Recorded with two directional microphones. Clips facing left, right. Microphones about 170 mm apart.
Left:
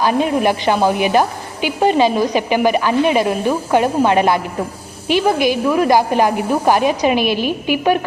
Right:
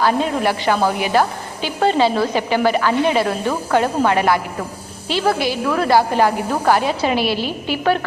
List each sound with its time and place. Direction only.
0.0 s a woman's voice: 15° left (ahead or behind)